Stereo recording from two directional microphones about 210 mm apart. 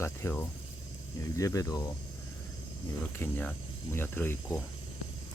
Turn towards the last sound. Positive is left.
turn(degrees=10)  # may be behind; listen again after turning